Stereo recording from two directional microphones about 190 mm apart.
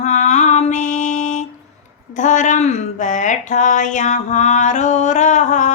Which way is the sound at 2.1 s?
40° left (ahead or behind).